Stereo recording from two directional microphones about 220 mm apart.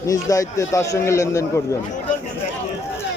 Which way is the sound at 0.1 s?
15° left (ahead or behind).